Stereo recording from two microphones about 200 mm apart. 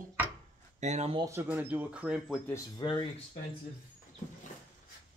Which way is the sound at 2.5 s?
20° left (ahead or behind).